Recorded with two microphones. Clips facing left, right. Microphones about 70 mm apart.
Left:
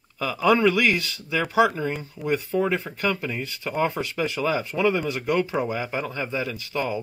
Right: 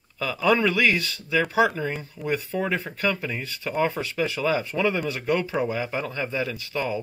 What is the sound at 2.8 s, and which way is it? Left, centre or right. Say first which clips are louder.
Speech: even; left.